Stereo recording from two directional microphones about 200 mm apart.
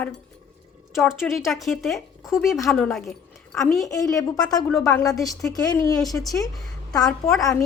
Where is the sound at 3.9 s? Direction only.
15° left (ahead or behind).